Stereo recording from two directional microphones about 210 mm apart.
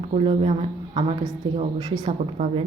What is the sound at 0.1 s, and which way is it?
Speech, 30° right (ahead or behind).